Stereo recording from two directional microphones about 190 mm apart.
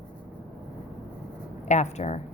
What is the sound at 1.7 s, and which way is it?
Speech, 35° left (ahead or behind).